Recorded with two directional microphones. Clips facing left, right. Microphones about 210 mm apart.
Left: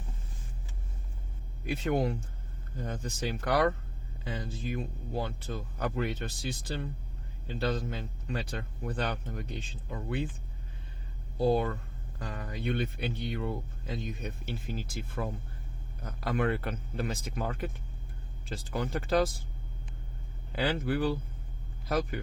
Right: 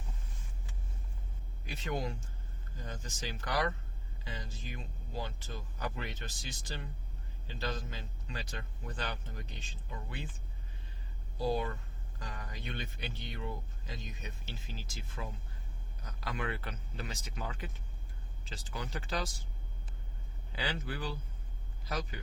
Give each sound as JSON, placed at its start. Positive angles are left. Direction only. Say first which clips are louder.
{"t": 1.6, "sound": "speech", "louder": "left 8 dB", "side_deg": 60}
{"t": 11.3, "sound": "speech", "louder": "left 7 dB", "side_deg": 60}
{"t": 20.6, "sound": "speech", "louder": "left 10 dB", "side_deg": 55}